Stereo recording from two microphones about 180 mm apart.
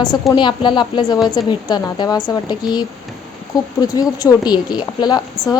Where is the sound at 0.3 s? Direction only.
25° left (ahead or behind).